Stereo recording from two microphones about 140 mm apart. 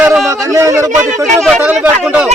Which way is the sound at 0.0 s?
5° right (ahead or behind).